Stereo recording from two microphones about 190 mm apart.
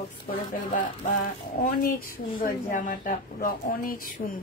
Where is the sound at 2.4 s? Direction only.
45° left (ahead or behind).